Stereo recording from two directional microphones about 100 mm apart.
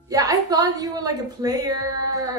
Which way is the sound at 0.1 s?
35° right (ahead or behind).